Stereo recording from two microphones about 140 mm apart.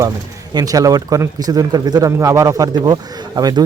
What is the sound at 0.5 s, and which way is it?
Speech, 25° right (ahead or behind).